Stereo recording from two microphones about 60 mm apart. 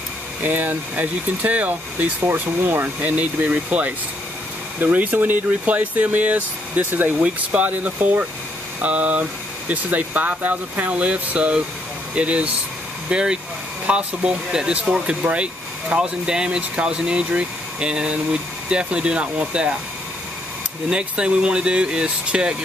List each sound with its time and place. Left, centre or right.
0.4 s speech: right
7.2 s speech: centre
20.9 s speech: centre